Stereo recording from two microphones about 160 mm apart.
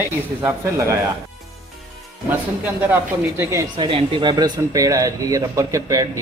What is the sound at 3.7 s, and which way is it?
Speech, 30° right (ahead or behind).